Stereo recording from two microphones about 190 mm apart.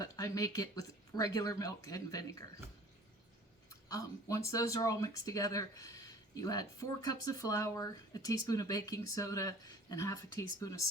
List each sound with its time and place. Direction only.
0.0 s speech: 15° left (ahead or behind)
3.7 s speech: 20° left (ahead or behind)